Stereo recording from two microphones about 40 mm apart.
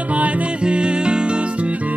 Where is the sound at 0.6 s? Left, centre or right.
Right.